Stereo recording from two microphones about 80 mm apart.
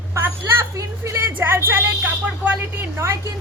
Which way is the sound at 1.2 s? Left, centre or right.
Right.